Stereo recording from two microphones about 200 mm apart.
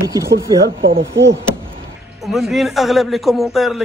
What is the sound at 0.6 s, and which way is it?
Speech, 55° right (ahead or behind).